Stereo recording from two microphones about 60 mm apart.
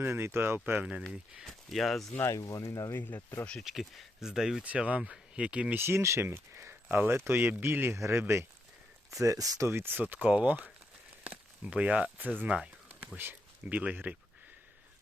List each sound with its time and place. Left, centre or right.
0.0 s speech: right
0.6 s speech: right
1.5 s speech: centre
2.3 s speech: left
2.9 s speech: left
3.2 s speech: left
3.6 s speech: centre
4.6 s speech: right
5.7 s speech: right
7.9 s speech: right
9.6 s speech: right
10.0 s speech: right
12.5 s pigeon: centre
13.7 s speech: right